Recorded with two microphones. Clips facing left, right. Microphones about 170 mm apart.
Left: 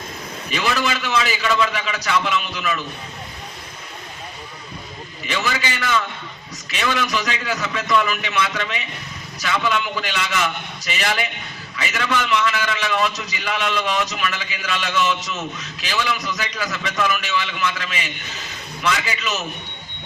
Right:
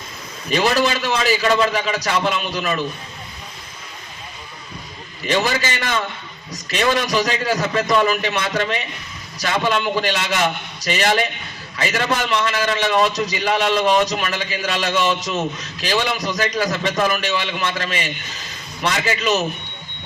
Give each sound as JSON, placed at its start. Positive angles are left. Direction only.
{"t": 0.5, "sound": "a man's voice", "side_deg": -35}
{"t": 5.2, "sound": "a man's voice", "side_deg": -40}